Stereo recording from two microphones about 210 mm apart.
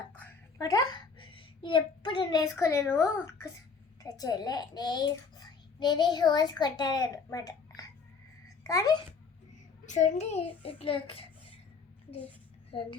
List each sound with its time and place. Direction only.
0.1 s a child's voice: 10° left (ahead or behind)
8.6 s a child's voice: 15° left (ahead or behind)
9.8 s a child's voice: 35° left (ahead or behind)